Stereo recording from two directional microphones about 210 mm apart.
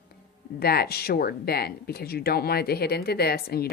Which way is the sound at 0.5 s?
50° left (ahead or behind).